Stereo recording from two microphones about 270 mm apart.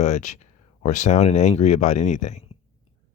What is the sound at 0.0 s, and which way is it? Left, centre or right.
Speech, left.